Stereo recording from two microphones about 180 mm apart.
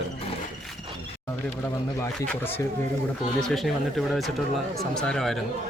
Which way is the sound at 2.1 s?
10° left (ahead or behind).